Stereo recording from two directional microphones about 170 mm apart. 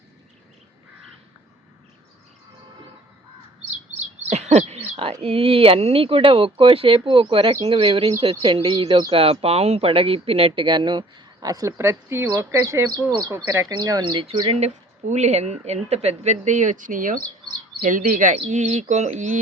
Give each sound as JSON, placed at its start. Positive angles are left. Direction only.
{"t": 4.3, "sound": "bird", "side_deg": -40}
{"t": 5.2, "sound": "speech", "side_deg": -35}